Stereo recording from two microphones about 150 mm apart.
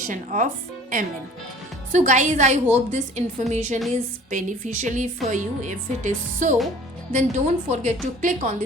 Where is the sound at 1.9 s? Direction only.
55° right (ahead or behind).